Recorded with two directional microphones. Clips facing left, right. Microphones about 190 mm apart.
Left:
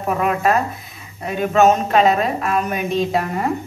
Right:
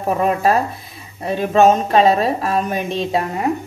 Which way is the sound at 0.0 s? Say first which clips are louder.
Right 2 dB; 30° right (ahead or behind).